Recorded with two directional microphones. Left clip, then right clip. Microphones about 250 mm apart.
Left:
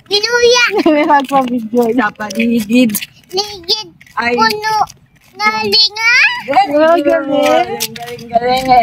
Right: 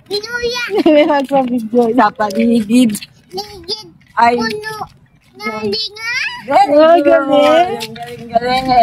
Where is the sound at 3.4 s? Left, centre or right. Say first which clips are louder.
Left 7 dB; centre.